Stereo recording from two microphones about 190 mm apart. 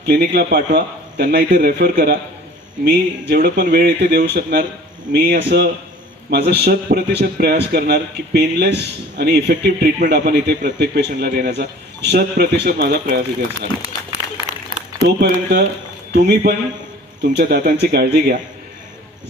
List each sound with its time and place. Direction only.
0.0 s speech: 60° right (ahead or behind)
15.0 s speech: 60° right (ahead or behind)